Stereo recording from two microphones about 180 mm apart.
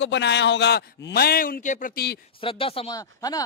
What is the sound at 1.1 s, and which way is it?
Speech, 55° left (ahead or behind).